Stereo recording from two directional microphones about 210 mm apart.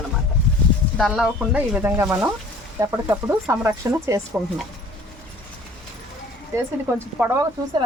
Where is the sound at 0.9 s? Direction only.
Centre (ahead or behind).